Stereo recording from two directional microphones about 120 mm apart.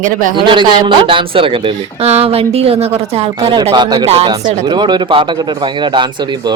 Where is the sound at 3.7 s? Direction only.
40° right (ahead or behind).